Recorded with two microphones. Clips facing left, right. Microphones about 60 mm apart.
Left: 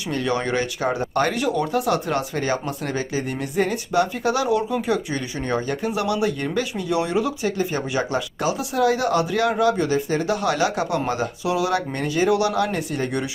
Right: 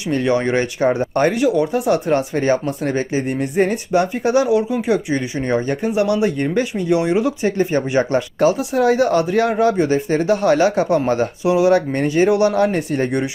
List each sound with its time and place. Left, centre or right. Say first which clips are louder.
0.0 s speech: right 6 dB; right
1.3 s speech: right 5 dB; centre
4.4 s speech: right 4 dB; centre
7.5 s speech: right 6 dB; right
13.1 s speech: right 5 dB; right